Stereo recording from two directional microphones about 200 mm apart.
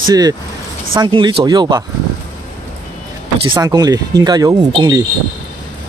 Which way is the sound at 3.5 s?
20° right (ahead or behind).